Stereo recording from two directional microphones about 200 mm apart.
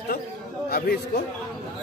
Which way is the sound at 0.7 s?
50° left (ahead or behind).